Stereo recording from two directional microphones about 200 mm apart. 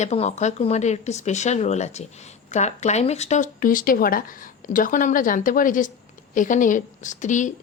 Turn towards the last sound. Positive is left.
turn(degrees=40)  # may be behind; listen again after turning